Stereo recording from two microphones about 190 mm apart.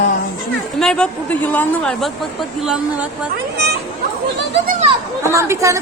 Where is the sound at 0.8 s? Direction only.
5° left (ahead or behind).